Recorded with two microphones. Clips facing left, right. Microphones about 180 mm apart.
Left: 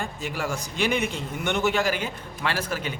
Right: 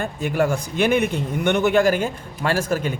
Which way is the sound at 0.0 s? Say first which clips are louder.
Right 9 dB; 55° right (ahead or behind).